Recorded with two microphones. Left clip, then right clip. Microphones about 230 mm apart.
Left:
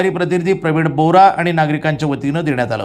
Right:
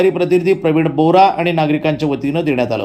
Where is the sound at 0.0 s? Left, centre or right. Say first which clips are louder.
Right 3 dB; centre.